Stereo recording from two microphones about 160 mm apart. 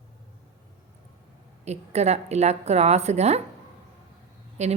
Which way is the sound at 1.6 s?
45° right (ahead or behind).